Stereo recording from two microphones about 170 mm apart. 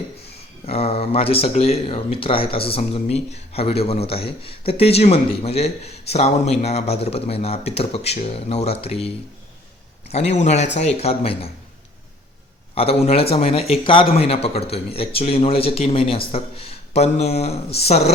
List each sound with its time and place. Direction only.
0.6 s speech: 35° left (ahead or behind)
12.7 s speech: 35° left (ahead or behind)